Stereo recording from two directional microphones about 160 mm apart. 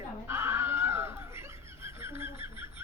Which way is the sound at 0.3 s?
15° right (ahead or behind).